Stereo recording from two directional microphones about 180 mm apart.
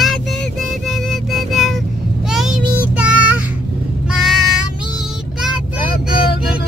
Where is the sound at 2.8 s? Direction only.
5° right (ahead or behind).